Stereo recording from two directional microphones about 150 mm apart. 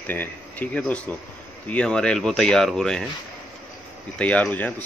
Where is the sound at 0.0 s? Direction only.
10° left (ahead or behind).